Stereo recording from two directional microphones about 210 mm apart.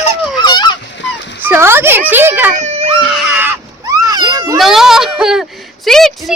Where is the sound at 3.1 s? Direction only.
5° right (ahead or behind).